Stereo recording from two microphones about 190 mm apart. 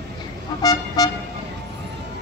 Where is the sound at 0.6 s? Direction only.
20° left (ahead or behind).